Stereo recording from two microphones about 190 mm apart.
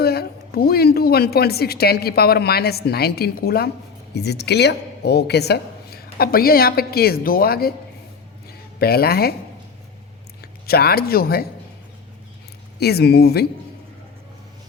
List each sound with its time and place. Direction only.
0.0 s a woman's voice: 55° left (ahead or behind)
8.8 s a woman's voice: 55° left (ahead or behind)
10.7 s a woman's voice: 55° left (ahead or behind)
12.8 s a woman's voice: 55° left (ahead or behind)